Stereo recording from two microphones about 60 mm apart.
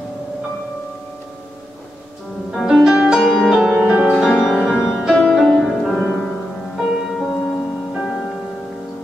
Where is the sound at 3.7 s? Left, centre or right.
Centre.